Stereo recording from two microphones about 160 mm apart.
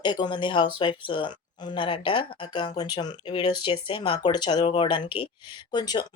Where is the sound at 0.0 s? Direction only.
30° left (ahead or behind).